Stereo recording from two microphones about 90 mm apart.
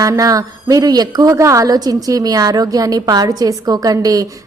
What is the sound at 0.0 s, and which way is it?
A woman's voice, 40° right (ahead or behind).